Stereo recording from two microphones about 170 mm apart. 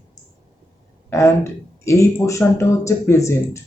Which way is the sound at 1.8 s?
15° left (ahead or behind).